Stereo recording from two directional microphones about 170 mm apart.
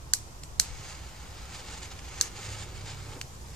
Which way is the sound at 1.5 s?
5° left (ahead or behind).